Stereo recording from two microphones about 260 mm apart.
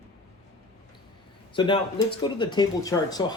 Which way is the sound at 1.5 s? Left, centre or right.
Centre.